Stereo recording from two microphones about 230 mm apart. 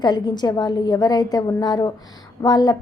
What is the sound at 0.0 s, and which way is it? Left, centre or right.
A woman's voice, centre.